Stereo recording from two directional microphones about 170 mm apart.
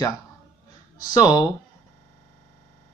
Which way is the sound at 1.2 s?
25° left (ahead or behind).